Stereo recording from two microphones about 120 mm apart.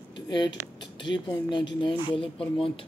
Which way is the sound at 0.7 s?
40° left (ahead or behind).